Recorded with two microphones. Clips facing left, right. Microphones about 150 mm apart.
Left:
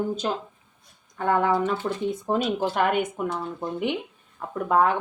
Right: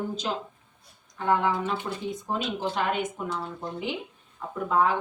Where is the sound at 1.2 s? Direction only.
50° left (ahead or behind).